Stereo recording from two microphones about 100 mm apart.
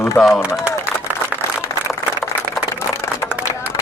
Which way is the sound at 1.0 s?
15° right (ahead or behind).